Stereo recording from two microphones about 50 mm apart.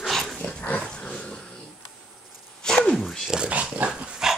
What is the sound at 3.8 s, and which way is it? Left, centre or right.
Dog, right.